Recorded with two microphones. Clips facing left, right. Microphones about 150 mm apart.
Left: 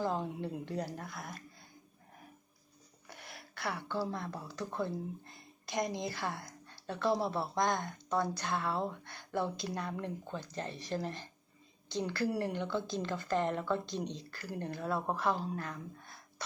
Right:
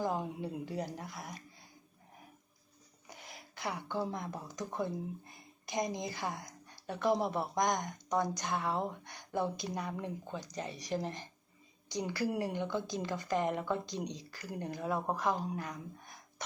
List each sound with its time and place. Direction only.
0.0 s a woman's voice: 10° right (ahead or behind)
1.1 s speech: centre (ahead or behind)
3.1 s a woman's voice: 15° right (ahead or behind)